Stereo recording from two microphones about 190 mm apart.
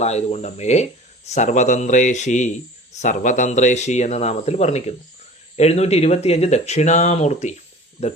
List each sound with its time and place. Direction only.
0.0 s speech: 35° left (ahead or behind)